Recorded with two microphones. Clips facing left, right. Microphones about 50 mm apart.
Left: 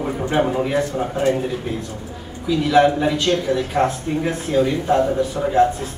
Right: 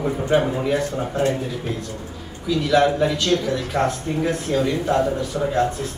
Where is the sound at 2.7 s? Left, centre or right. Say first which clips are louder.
Left 2 dB; centre.